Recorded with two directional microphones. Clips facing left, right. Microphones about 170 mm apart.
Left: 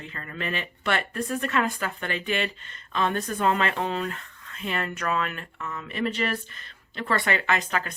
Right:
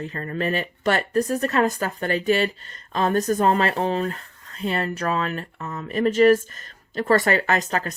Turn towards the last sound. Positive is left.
turn(degrees=-40)  # may be behind; listen again after turning